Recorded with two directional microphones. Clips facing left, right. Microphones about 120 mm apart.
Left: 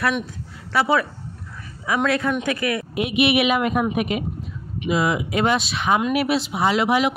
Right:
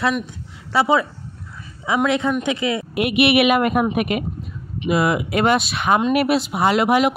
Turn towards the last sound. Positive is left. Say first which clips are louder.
# right 3 dB
turn(degrees=-50)  # may be behind; listen again after turning